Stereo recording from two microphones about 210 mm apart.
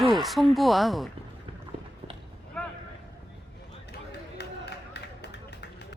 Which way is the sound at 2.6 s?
5° left (ahead or behind).